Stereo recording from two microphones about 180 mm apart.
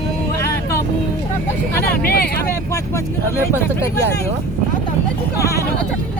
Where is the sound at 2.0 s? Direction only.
60° left (ahead or behind).